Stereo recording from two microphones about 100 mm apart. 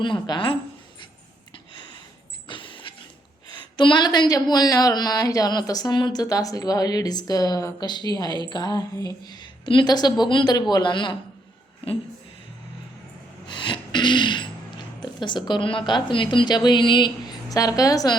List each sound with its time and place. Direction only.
0.0 s a woman's voice: 50° left (ahead or behind)
2.5 s a sound: 55° left (ahead or behind)
3.8 s speech: 50° left (ahead or behind)
6.2 s a woman's voice: 35° left (ahead or behind)
13.5 s a sound: 50° left (ahead or behind)
15.0 s a woman's voice: 50° left (ahead or behind)
17.5 s speech: 35° left (ahead or behind)